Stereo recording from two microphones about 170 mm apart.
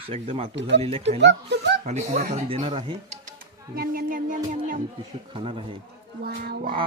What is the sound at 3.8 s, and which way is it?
Singing, 55° right (ahead or behind).